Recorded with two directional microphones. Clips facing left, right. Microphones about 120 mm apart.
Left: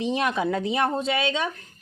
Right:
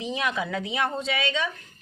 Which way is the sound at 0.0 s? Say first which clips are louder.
Left 4 dB; 30° left (ahead or behind).